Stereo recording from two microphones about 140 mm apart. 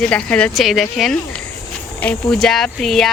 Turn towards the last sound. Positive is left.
turn(degrees=0)  # may be behind; listen again after turning